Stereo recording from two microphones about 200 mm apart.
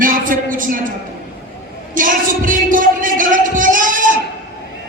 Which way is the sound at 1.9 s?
40° right (ahead or behind).